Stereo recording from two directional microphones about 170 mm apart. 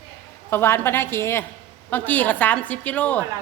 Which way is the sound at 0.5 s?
15° left (ahead or behind).